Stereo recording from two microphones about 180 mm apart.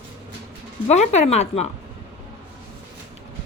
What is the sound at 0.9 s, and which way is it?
Speech, 40° left (ahead or behind).